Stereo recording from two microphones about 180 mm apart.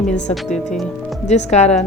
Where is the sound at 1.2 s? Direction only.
40° left (ahead or behind).